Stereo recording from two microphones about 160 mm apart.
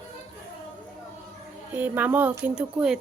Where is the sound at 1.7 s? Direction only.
10° right (ahead or behind).